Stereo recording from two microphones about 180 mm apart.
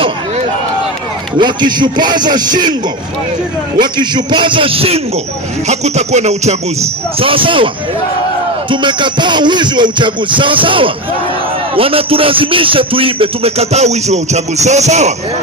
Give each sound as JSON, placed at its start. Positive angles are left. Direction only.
{"t": 1.4, "sound": "music", "side_deg": -25}
{"t": 3.8, "sound": "music", "side_deg": -25}
{"t": 5.7, "sound": "a man's voice", "side_deg": -40}
{"t": 7.2, "sound": "music", "side_deg": -30}
{"t": 11.7, "sound": "a man's voice", "side_deg": -30}